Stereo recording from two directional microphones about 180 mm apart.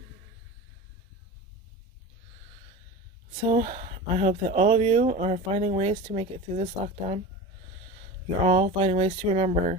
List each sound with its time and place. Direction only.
3.6 s speech: 40° right (ahead or behind)
8.4 s speech: 35° right (ahead or behind)